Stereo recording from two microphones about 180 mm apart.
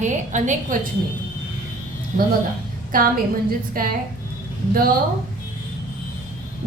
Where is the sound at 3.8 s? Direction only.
55° right (ahead or behind).